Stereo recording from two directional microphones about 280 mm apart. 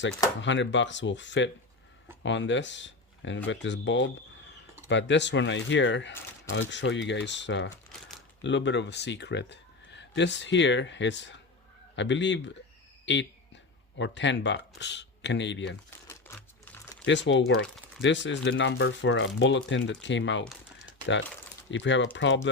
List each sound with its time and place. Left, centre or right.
0.4 s speech: left
13.1 s a sound: left
14.0 s speech: left
16.0 s typing: centre
17.1 s speech: left
20.8 s typing: left
21.7 s speech: left